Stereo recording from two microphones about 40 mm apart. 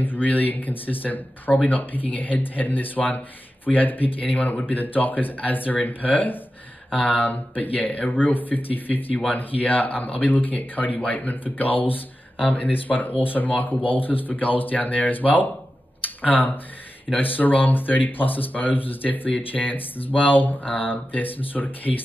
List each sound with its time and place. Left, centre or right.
0.0 s speech: left
16.0 s a sound: left
17.2 s speech: left
20.6 s speech: left
20.9 s speech: left